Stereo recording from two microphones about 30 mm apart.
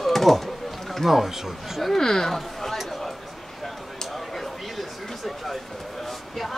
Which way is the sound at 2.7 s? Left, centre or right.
Centre.